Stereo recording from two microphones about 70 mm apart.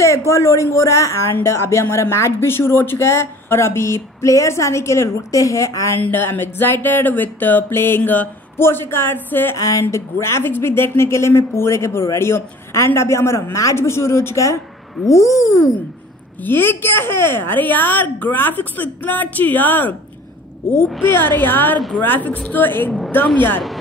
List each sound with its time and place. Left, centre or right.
0.0 s speech: left
5.9 s speech: left
9.6 s speech: left
15.0 s a sound: left
16.3 s a woman's voice: left
21.0 s a woman's voice: left